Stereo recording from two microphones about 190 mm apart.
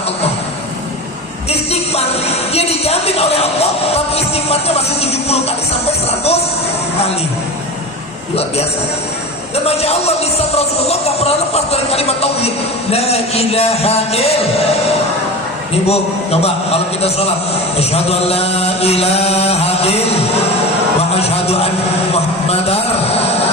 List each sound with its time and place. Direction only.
1.5 s a sound: 35° left (ahead or behind)
9.6 s speech: 30° left (ahead or behind)
15.9 s speech: 30° left (ahead or behind)
17.7 s mantra: 30° left (ahead or behind)
21.2 s speech: 35° left (ahead or behind)
22.1 s a sound: 30° left (ahead or behind)